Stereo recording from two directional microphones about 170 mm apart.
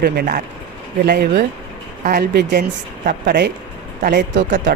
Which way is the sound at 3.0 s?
60° right (ahead or behind).